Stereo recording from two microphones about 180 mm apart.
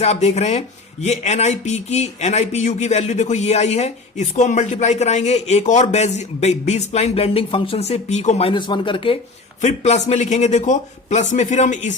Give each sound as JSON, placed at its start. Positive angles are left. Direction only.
{"t": 0.0, "sound": "a man's voice", "side_deg": 40}
{"t": 9.6, "sound": "a man's voice", "side_deg": 40}